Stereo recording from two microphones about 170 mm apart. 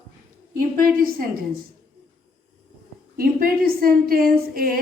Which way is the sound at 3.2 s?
60° right (ahead or behind).